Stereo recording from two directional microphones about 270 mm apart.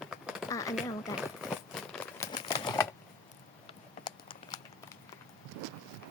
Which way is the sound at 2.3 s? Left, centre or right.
Centre.